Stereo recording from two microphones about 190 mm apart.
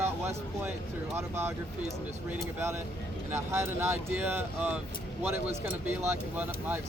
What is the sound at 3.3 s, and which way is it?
Speech, 15° right (ahead or behind).